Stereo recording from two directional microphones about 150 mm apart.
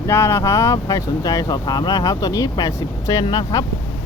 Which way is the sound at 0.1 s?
15° left (ahead or behind).